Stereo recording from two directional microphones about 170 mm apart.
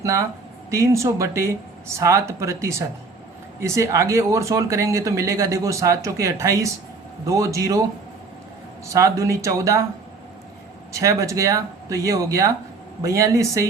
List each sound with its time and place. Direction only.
0.0 s speech: 20° right (ahead or behind)
8.9 s speech: 20° right (ahead or behind)
10.9 s speech: 20° right (ahead or behind)